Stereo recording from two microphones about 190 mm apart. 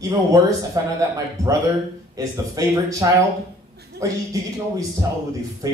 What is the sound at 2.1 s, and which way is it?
A man's voice, 20° right (ahead or behind).